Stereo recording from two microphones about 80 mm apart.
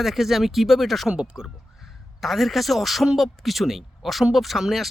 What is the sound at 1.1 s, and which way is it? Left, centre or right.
Speech, centre.